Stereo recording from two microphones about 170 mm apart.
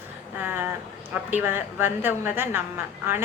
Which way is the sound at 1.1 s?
10° right (ahead or behind).